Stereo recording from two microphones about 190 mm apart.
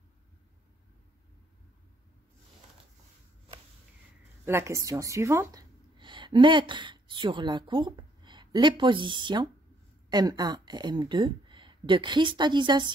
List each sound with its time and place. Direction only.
4.5 s a woman's voice: 15° right (ahead or behind)